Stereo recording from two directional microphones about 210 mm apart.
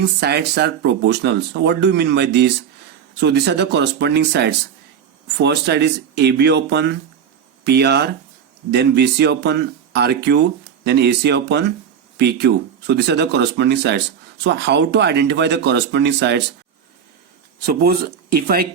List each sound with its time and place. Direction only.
0.0 s speech: 50° right (ahead or behind)
17.7 s speech: 45° right (ahead or behind)